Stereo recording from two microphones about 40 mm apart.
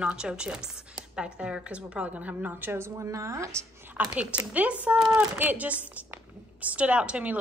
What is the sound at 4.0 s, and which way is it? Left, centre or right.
Speech, right.